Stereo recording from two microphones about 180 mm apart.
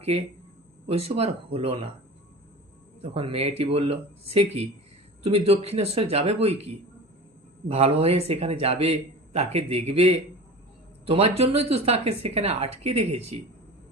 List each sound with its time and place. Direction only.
0.9 s a man's voice: 35° right (ahead or behind)
3.0 s a man's voice: 30° right (ahead or behind)